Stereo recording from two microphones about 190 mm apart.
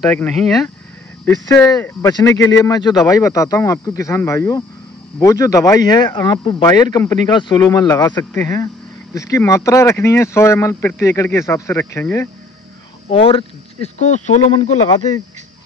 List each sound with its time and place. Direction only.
0.1 s speech: 5° left (ahead or behind)
1.7 s speech: 20° left (ahead or behind)
13.1 s speech: 30° left (ahead or behind)
14.9 s speech: 20° left (ahead or behind)